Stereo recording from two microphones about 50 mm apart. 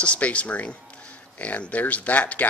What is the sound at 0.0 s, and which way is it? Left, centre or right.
Speech, left.